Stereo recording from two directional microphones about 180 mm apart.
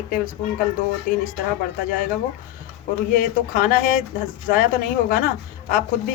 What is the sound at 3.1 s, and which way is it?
Speech, 50° left (ahead or behind).